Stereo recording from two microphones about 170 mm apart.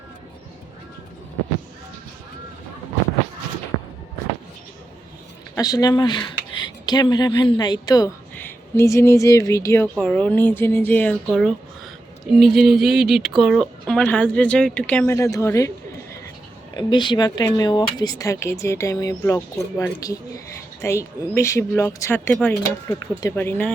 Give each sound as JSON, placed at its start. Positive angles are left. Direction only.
{"t": 5.5, "sound": "speech", "side_deg": 20}
{"t": 16.7, "sound": "speech", "side_deg": 25}